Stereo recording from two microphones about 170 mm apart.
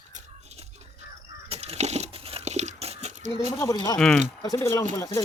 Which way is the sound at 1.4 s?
35° right (ahead or behind).